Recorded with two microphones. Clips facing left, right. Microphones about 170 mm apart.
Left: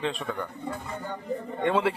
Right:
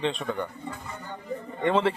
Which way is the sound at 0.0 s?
Centre (ahead or behind).